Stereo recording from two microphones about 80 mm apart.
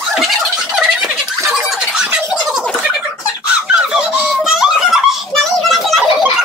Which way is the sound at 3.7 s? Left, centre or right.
Centre.